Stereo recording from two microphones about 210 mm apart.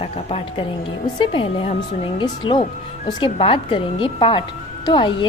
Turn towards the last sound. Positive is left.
turn(degrees=20)  # may be behind; listen again after turning